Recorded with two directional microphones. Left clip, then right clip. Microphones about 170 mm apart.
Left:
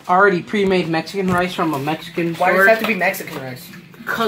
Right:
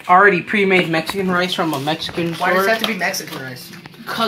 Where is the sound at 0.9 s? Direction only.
15° right (ahead or behind).